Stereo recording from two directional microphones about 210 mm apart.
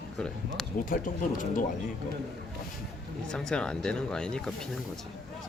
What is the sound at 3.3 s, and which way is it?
Speech, 5° left (ahead or behind).